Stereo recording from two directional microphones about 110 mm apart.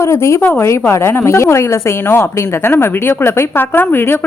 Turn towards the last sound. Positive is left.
turn(degrees=20)  # may be behind; listen again after turning